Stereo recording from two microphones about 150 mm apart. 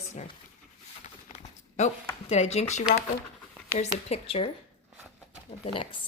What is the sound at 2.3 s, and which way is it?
A woman's voice, 45° left (ahead or behind).